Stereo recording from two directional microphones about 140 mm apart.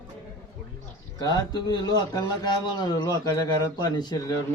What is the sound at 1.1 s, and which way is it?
A man's voice, 30° left (ahead or behind).